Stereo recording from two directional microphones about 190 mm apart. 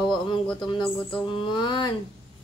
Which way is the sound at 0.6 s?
25° left (ahead or behind).